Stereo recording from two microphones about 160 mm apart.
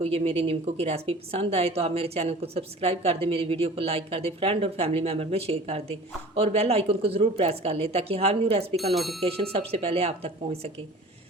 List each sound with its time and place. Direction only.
0.0 s a woman's voice: 35° right (ahead or behind)
8.7 s speech: centre (ahead or behind)
9.2 s a woman's voice: 40° right (ahead or behind)